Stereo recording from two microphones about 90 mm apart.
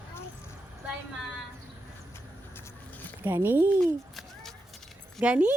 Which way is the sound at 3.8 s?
Centre (ahead or behind).